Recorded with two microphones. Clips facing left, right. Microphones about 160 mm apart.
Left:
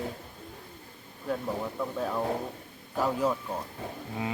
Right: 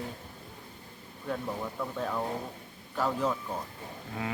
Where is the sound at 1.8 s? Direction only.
10° left (ahead or behind).